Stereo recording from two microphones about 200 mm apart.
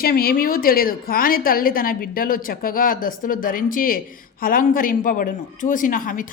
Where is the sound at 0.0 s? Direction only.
50° left (ahead or behind).